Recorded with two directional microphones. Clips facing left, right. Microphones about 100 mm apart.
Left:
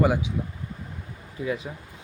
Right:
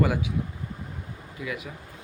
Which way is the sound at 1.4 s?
30° left (ahead or behind).